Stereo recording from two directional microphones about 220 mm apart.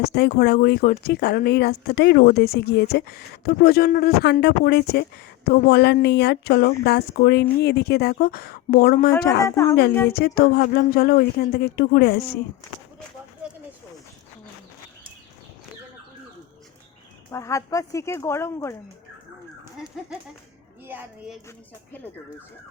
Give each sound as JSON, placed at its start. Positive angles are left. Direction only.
{"t": 0.0, "sound": "speech", "side_deg": 45}
{"t": 9.4, "sound": "speech", "side_deg": 15}
{"t": 10.1, "sound": "speech", "side_deg": 45}
{"t": 17.3, "sound": "speech", "side_deg": 15}
{"t": 20.8, "sound": "a woman's voice", "side_deg": -10}